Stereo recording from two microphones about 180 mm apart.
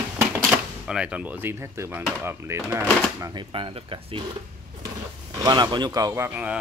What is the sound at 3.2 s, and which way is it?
Speech, 25° right (ahead or behind).